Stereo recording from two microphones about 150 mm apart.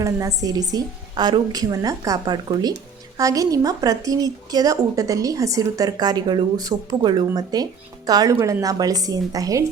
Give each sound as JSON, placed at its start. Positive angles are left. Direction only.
{"t": 0.0, "sound": "speech", "side_deg": -20}